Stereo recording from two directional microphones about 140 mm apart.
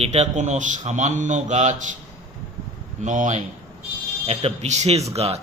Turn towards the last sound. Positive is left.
turn(degrees=-45)  # may be behind; listen again after turning